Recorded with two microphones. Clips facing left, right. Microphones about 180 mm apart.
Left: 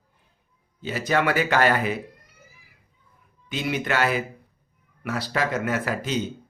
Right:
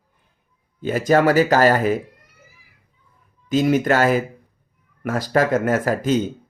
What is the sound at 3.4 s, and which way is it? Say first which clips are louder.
A man's voice: right 10 dB; 45° right (ahead or behind).